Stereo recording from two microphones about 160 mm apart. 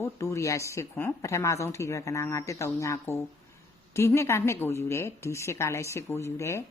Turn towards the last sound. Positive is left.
turn(degrees=20)  # may be behind; listen again after turning